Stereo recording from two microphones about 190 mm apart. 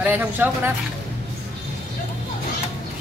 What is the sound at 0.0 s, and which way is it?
Speech, 10° right (ahead or behind).